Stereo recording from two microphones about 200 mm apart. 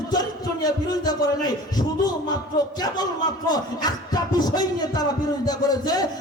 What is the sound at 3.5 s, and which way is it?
Speech, 20° left (ahead or behind).